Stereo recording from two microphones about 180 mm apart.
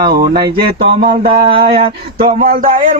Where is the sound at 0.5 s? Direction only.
60° right (ahead or behind).